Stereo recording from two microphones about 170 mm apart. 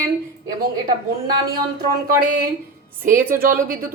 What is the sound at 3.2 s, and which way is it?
Speech, 55° right (ahead or behind).